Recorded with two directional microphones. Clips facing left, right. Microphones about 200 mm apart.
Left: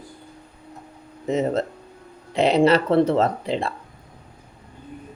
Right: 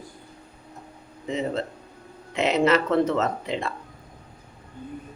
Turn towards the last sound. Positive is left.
turn(degrees=35)  # may be behind; listen again after turning